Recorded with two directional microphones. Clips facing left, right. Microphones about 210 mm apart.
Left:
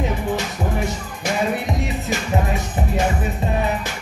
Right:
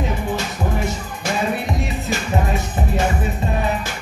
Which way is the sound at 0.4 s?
15° left (ahead or behind).